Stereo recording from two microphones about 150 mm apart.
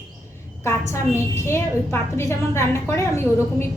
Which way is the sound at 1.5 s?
15° left (ahead or behind).